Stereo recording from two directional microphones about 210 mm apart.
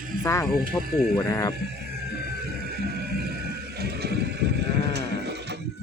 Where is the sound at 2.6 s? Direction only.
50° right (ahead or behind).